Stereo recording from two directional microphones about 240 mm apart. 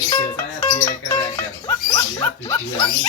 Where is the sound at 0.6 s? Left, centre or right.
Centre.